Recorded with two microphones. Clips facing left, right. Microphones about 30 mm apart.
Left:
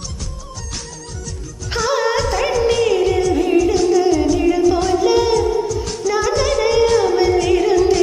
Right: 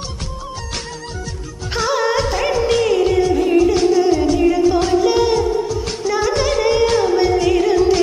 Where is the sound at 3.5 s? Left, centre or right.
Right.